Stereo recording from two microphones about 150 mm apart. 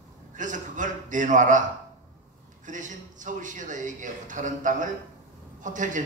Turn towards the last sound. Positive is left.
turn(degrees=-60)  # may be behind; listen again after turning